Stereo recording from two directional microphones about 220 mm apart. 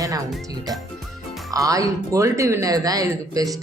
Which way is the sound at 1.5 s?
15° right (ahead or behind).